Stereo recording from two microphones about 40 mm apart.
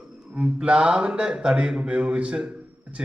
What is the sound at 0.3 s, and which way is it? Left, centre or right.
Speech, right.